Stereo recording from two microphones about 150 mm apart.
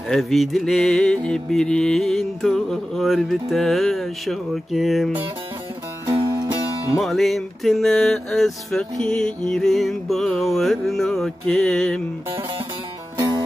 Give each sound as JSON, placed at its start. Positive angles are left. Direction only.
{"t": 0.1, "sound": "music", "side_deg": 0}
{"t": 6.0, "sound": "music", "side_deg": -30}
{"t": 7.0, "sound": "music", "side_deg": 0}